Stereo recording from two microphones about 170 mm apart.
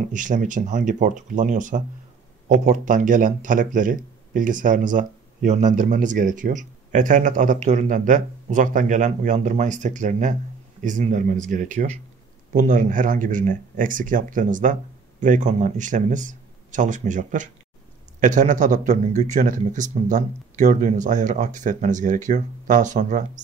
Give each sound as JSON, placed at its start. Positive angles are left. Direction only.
{"t": 0.1, "sound": "a man's voice", "side_deg": -50}